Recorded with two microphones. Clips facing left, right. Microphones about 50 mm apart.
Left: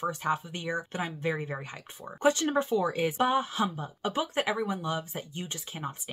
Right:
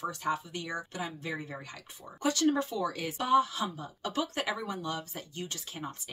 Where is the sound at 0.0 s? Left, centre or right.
Left.